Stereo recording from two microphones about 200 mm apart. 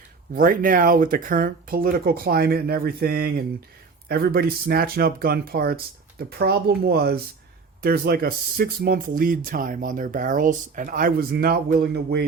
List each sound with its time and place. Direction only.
0.3 s speech: 40° right (ahead or behind)